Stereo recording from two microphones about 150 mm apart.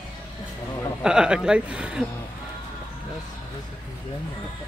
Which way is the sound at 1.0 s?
5° right (ahead or behind).